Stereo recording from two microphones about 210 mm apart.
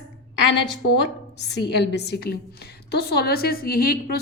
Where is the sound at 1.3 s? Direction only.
55° left (ahead or behind).